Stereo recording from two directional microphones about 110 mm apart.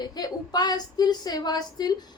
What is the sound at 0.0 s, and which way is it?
A woman's voice, 40° left (ahead or behind).